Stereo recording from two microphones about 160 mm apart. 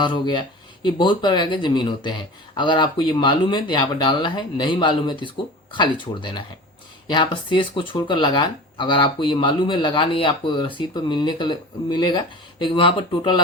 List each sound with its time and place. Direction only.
0.0 s speech: 30° left (ahead or behind)